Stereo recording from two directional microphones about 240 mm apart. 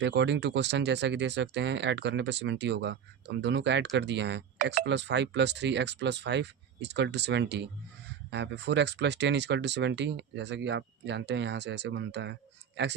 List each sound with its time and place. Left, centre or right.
0.0 s speech: right
4.5 s speech: right
4.9 s speech: right